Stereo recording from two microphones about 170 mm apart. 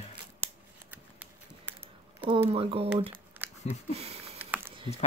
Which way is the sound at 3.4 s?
10° right (ahead or behind).